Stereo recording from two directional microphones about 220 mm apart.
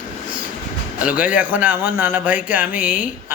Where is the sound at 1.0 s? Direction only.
5° right (ahead or behind).